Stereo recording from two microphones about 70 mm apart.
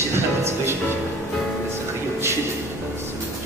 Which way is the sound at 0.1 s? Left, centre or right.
Right.